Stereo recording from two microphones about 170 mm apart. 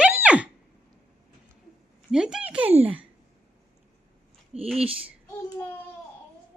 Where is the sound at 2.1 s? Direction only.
5° right (ahead or behind).